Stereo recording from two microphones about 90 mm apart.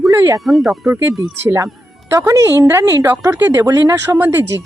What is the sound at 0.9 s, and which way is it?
Speech, 25° right (ahead or behind).